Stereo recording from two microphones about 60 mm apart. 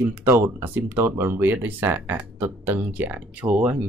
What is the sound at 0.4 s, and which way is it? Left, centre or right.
Speech, right.